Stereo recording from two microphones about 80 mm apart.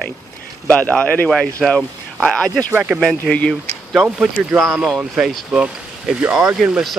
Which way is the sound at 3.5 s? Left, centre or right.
Centre.